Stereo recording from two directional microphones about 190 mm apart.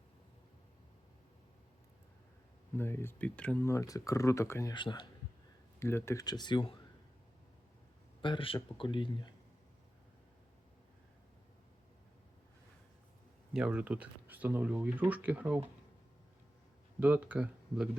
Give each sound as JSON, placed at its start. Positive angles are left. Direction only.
{"t": 2.7, "sound": "speech", "side_deg": 10}
{"t": 5.8, "sound": "speech", "side_deg": 15}
{"t": 8.2, "sound": "speech", "side_deg": 25}
{"t": 13.5, "sound": "speech", "side_deg": -5}
{"t": 17.0, "sound": "speech", "side_deg": -10}